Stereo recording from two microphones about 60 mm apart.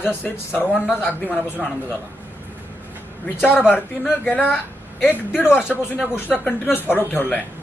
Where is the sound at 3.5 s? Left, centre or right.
Left.